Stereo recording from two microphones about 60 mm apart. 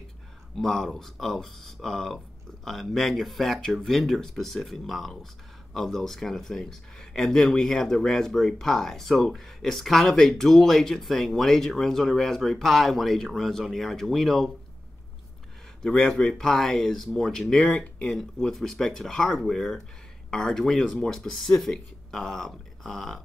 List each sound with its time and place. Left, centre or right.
0.6 s speech: centre
15.8 s speech: centre
17.6 s speech: left
18.1 s speech: centre